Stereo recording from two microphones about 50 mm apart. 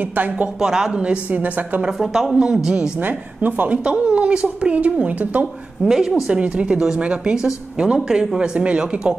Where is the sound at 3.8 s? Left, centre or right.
Right.